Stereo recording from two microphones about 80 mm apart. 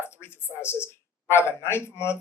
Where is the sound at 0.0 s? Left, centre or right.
Left.